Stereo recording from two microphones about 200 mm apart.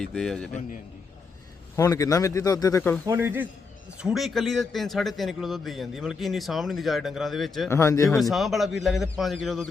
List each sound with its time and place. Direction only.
0.0 s a man's voice: centre (ahead or behind)
1.7 s speech: 15° left (ahead or behind)
3.1 s a man's voice: 10° right (ahead or behind)
7.7 s speech: 15° left (ahead or behind)
8.2 s a man's voice: centre (ahead or behind)